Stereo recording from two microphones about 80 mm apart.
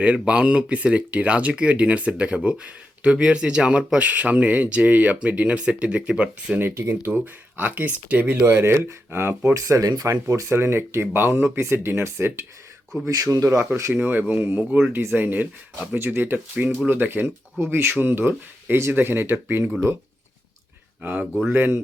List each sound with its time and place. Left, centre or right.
0.0 s speech: centre
6.6 s speech: right
8.4 s speech: right
9.5 s speech: right
10.2 s speech: right
13.1 s speech: right
13.7 s speech: right
21.0 s speech: right